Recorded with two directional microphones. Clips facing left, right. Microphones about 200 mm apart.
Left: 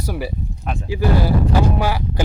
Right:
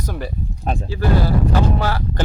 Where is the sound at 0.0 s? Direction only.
10° left (ahead or behind).